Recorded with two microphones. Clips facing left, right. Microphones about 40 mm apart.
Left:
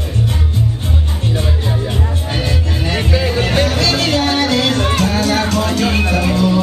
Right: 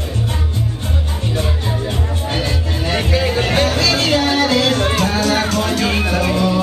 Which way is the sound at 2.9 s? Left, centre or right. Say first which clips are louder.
Even; centre.